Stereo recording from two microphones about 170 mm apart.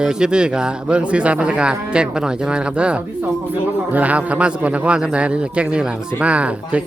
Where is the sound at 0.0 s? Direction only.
5° right (ahead or behind).